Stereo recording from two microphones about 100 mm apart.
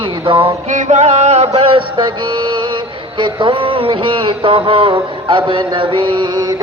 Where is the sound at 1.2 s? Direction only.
90° right; by 1.8 s 70° right (ahead or behind).